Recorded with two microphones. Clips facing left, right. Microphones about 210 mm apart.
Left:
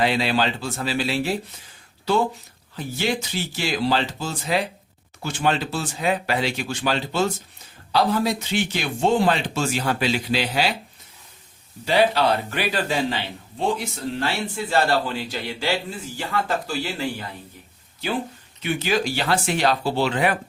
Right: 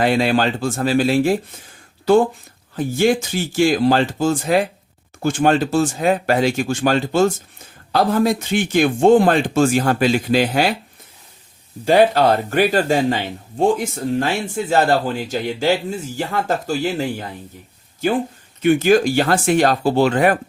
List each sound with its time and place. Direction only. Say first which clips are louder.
0.0 s speech: right 5 dB; 50° right (ahead or behind)
11.9 s speech: right 6 dB; 50° right (ahead or behind)
18.6 s speech: right 10 dB; 50° right (ahead or behind)